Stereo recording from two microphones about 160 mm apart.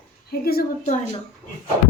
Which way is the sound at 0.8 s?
50° left (ahead or behind).